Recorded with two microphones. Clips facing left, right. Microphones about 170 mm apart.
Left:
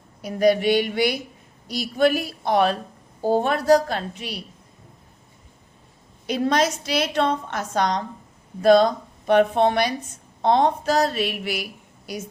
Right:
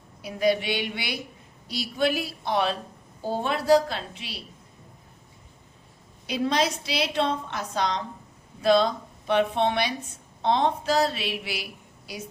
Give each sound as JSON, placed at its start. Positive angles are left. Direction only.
{"t": 0.2, "sound": "a woman's voice", "side_deg": 45}
{"t": 6.2, "sound": "a woman's voice", "side_deg": 50}